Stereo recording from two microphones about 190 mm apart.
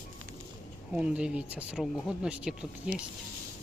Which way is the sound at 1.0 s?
5° right (ahead or behind).